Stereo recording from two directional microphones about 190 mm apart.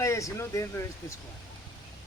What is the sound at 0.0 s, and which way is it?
Speech, 15° left (ahead or behind).